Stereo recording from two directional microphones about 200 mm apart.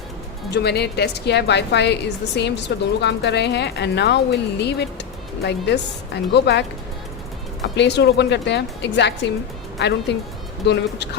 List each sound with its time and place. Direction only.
0.5 s a woman's voice: 55° left (ahead or behind)
7.8 s a woman's voice: 60° left (ahead or behind)